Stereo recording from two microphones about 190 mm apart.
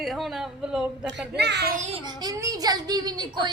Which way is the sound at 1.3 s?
65° right (ahead or behind).